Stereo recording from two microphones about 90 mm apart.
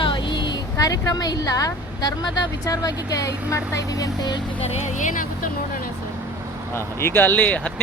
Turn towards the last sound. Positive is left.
turn(degrees=15)  # may be behind; listen again after turning